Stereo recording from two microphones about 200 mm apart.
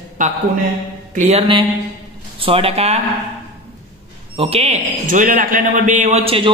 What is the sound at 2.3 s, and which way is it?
Speech, 25° right (ahead or behind).